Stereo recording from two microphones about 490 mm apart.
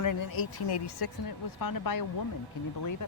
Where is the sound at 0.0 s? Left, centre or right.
Left.